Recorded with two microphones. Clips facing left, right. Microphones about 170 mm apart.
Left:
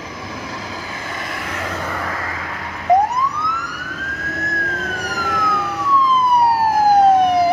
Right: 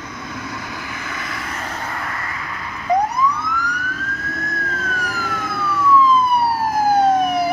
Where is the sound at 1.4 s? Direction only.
85° left.